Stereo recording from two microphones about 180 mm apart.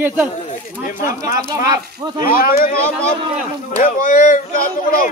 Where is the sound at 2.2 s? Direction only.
55° left (ahead or behind).